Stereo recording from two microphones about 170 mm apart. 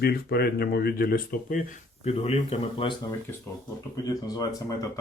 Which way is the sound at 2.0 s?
35° left (ahead or behind).